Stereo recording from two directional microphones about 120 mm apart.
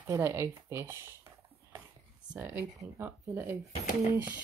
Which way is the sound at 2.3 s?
15° right (ahead or behind).